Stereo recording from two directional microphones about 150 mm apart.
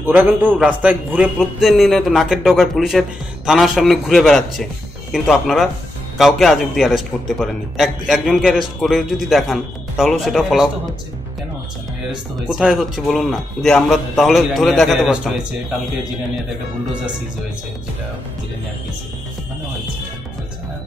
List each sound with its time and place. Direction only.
0.0 s a man's voice: 15° right (ahead or behind)
12.4 s a man's voice: 5° right (ahead or behind)